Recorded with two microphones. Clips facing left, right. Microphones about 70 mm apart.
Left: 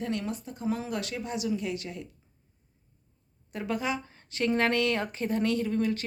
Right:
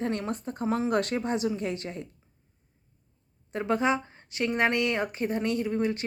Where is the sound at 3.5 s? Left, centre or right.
Right.